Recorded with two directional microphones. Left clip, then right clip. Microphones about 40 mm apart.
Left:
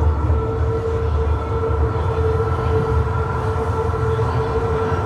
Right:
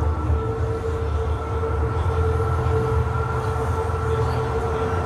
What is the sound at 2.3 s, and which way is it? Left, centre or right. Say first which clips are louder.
Train: left 4 dB; right.